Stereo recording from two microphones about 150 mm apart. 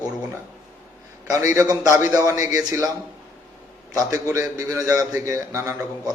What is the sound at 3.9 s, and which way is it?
A man's voice, 20° right (ahead or behind).